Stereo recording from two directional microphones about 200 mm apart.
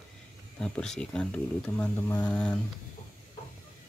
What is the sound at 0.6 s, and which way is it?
Speech, 5° left (ahead or behind).